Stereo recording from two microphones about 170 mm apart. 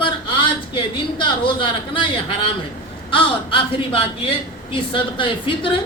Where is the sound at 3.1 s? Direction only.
30° left (ahead or behind).